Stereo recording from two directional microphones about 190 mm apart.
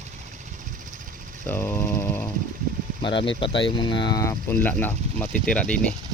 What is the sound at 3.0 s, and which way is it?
Speech, 25° left (ahead or behind).